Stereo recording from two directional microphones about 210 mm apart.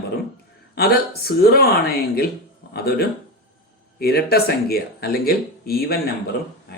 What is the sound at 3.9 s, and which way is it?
Speech, 50° left (ahead or behind).